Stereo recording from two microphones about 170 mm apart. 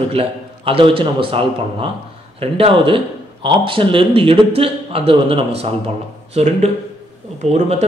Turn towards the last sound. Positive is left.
turn(degrees=-40)  # may be behind; listen again after turning